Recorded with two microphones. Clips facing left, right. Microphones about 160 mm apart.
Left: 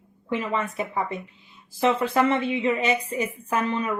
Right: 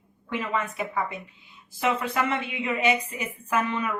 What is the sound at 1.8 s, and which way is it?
A woman's voice, 30° left (ahead or behind).